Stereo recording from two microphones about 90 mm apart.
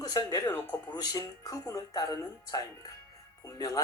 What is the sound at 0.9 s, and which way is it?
Speech, 45° left (ahead or behind).